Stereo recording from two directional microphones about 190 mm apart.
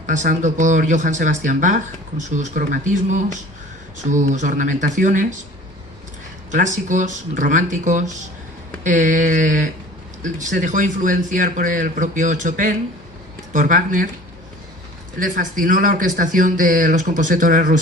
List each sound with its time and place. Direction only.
0.1 s speech: 40° right (ahead or behind)
4.1 s speech: 40° right (ahead or behind)
6.5 s speech: 40° right (ahead or behind)
15.2 s speech: 45° right (ahead or behind)